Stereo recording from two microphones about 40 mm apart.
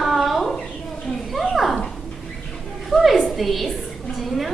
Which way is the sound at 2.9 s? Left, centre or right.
Centre.